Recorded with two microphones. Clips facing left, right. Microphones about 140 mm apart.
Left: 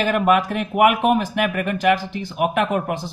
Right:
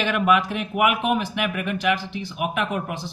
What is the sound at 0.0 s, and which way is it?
Speech, 45° left (ahead or behind).